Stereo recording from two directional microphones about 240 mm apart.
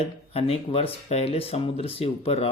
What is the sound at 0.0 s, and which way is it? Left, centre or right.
Speech, left.